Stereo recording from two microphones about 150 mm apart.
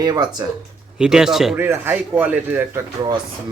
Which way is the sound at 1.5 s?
15° right (ahead or behind).